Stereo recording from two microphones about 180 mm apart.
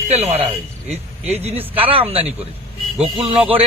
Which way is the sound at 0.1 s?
35° right (ahead or behind).